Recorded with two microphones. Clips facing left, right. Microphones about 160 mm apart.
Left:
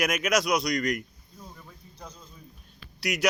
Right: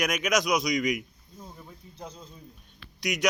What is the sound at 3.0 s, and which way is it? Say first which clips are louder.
Speech: left 1 dB; 5° left (ahead or behind).